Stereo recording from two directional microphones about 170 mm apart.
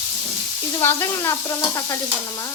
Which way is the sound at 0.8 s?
15° left (ahead or behind).